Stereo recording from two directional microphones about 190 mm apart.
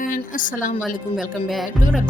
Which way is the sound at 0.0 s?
45° left (ahead or behind).